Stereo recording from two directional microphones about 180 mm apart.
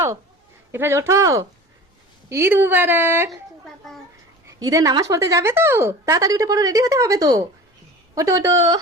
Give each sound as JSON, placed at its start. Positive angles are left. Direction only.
{"t": 0.7, "sound": "speech", "side_deg": -15}
{"t": 4.6, "sound": "a woman's voice", "side_deg": -20}